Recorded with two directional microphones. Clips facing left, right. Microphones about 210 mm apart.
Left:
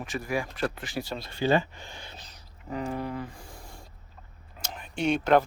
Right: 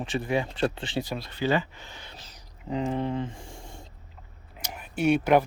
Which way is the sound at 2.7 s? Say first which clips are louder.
Right 4 dB; 20° right (ahead or behind).